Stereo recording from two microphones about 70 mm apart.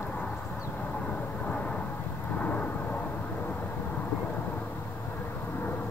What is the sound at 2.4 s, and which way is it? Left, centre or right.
Thunder, left.